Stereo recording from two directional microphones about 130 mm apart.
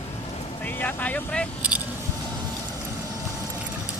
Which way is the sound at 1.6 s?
10° right (ahead or behind).